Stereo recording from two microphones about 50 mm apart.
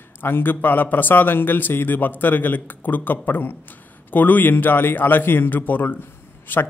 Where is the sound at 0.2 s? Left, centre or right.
Left.